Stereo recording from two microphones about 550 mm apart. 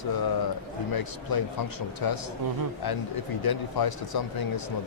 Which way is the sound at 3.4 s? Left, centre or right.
Left.